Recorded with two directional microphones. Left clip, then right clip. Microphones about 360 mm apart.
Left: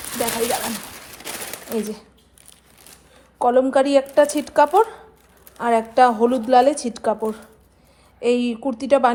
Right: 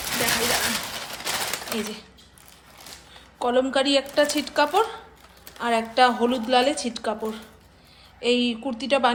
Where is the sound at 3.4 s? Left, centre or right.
Centre.